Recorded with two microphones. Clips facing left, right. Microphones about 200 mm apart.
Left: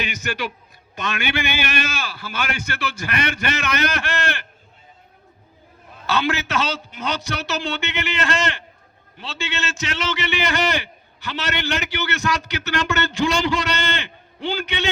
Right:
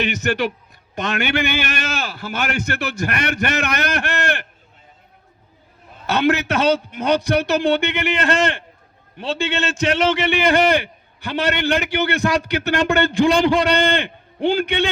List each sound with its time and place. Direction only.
0.2 s a man's voice: 55° right (ahead or behind)
6.1 s a man's voice: 60° right (ahead or behind)